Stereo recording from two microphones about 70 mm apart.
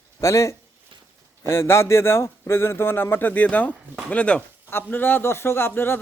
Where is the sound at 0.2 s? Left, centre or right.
Left; by 4.4 s centre.